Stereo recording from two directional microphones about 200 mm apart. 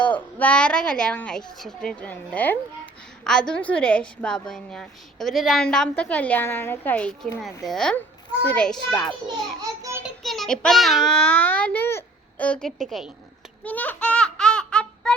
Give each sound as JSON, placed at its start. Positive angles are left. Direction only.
{"t": 0.0, "sound": "a woman's voice", "side_deg": 5}
{"t": 9.2, "sound": "a child's voice", "side_deg": -20}
{"t": 10.0, "sound": "a child's voice", "side_deg": 0}
{"t": 13.7, "sound": "a sound", "side_deg": 5}